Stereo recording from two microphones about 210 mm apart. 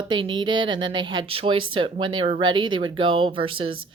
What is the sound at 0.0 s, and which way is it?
Speech, 20° right (ahead or behind).